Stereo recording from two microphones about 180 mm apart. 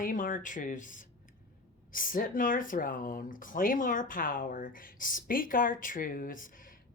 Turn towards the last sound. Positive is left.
turn(degrees=50)  # may be behind; listen again after turning